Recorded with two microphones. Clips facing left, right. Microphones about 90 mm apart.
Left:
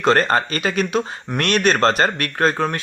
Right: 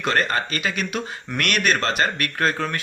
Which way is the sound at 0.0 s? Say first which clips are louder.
Left 6 dB; 35° left (ahead or behind).